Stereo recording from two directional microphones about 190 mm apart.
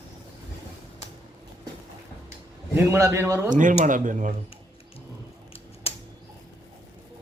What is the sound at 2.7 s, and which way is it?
Speech, 15° right (ahead or behind).